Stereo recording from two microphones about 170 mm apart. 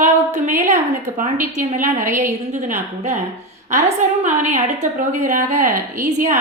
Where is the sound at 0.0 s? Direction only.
45° right (ahead or behind).